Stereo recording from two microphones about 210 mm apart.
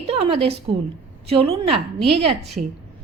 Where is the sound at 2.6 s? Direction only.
40° right (ahead or behind).